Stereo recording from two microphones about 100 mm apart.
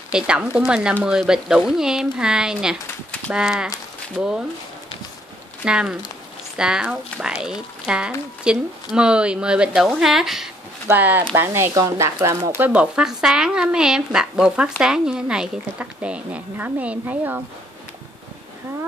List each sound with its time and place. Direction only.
0.1 s speech: 10° right (ahead or behind)
5.7 s speech: 10° right (ahead or behind)
10.9 s speech: 20° right (ahead or behind)
12.6 s speech: 10° right (ahead or behind)